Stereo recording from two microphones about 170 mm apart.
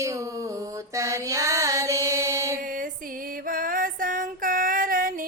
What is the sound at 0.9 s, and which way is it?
Mantra, 20° right (ahead or behind).